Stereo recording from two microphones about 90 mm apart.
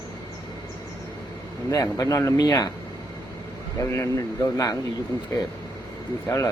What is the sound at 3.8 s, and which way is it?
A man's voice, 35° left (ahead or behind).